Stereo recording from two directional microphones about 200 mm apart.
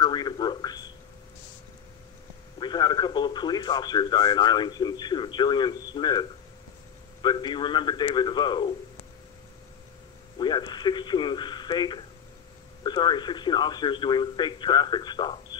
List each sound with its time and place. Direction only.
0.0 s a sound: 20° left (ahead or behind)
2.6 s speech: 20° left (ahead or behind)
10.4 s speech: 20° left (ahead or behind)